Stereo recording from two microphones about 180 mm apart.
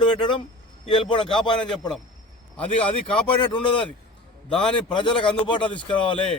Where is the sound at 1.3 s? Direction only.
5° left (ahead or behind).